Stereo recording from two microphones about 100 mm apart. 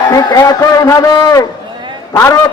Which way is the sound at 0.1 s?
40° left (ahead or behind).